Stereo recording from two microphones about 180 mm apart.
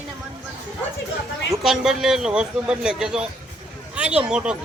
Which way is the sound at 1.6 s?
5° right (ahead or behind).